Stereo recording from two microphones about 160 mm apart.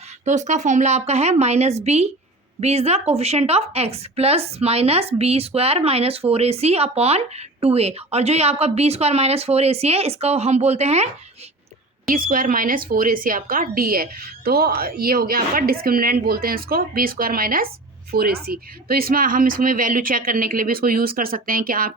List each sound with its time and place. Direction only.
0.3 s a woman's voice: 50° right (ahead or behind)
12.1 s speech: 60° right (ahead or behind)
18.1 s speech: 75° right (ahead or behind)